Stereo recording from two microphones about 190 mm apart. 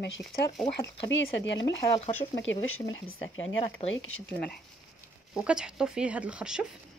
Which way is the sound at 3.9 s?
90° left.